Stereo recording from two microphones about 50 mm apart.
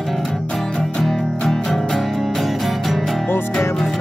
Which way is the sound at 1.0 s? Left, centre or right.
Centre.